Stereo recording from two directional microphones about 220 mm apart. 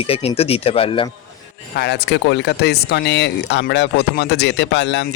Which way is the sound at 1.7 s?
50° left (ahead or behind).